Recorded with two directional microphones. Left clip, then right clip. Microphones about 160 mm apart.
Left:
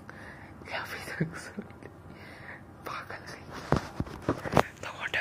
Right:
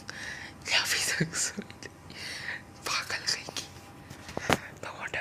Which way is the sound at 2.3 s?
10° right (ahead or behind).